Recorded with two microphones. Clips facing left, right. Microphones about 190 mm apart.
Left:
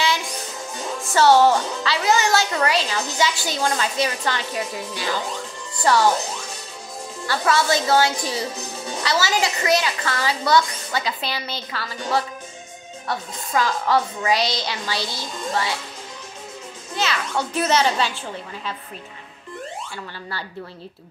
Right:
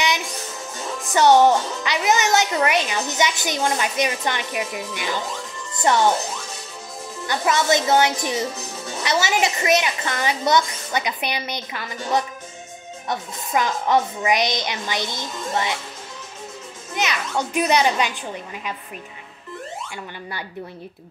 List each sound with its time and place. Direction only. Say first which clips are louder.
1.0 s a child's voice: right 1 dB; 20° right (ahead or behind)
7.2 s a child's voice: even; 20° right (ahead or behind)
16.9 s a child's voice: even; 15° right (ahead or behind)